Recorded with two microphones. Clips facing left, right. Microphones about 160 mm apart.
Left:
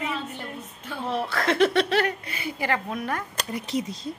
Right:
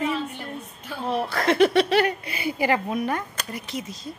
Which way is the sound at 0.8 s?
5° right (ahead or behind).